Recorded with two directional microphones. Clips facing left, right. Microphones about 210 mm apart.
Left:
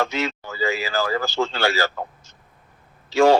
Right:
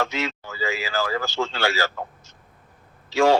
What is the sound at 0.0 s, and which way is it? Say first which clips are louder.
A man's voice: left 2 dB; 35° left (ahead or behind).